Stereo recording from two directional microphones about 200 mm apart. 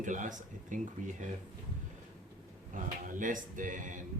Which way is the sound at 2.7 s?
40° right (ahead or behind).